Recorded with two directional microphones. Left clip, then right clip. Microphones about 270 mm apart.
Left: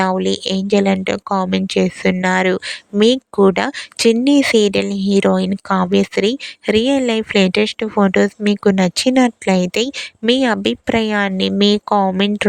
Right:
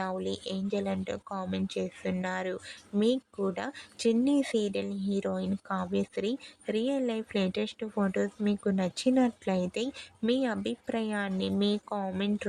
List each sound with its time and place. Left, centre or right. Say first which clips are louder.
0.0 s speech: left 17 dB; left